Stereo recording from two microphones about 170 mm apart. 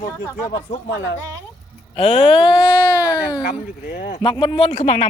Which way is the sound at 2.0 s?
35° left (ahead or behind).